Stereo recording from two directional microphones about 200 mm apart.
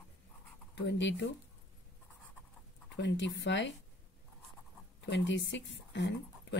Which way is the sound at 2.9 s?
65° left (ahead or behind).